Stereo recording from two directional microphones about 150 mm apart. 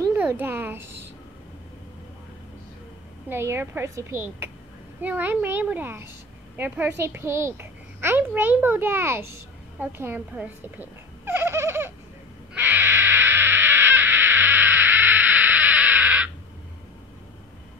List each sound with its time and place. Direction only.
0.1 s a child's voice: 10° right (ahead or behind)
3.3 s a child's voice: 15° right (ahead or behind)
12.5 s owl: 15° right (ahead or behind)